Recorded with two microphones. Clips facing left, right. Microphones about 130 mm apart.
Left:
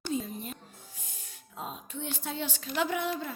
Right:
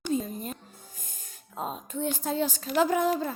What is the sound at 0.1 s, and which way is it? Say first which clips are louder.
Music: right 4 dB; 45° right (ahead or behind).